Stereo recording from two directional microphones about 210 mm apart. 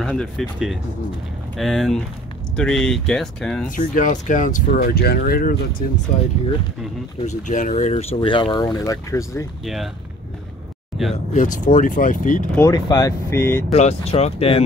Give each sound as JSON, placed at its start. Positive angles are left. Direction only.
{"t": 0.0, "sound": "speech", "side_deg": 5}
{"t": 3.6, "sound": "speech", "side_deg": 40}
{"t": 7.2, "sound": "speech", "side_deg": 35}
{"t": 11.3, "sound": "speech", "side_deg": 35}
{"t": 12.5, "sound": "speech", "side_deg": 15}
{"t": 13.7, "sound": "speech", "side_deg": 30}